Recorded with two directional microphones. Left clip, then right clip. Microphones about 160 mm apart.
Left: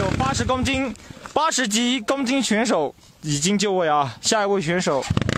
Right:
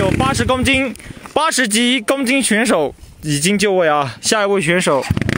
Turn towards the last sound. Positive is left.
turn(degrees=-25)  # may be behind; listen again after turning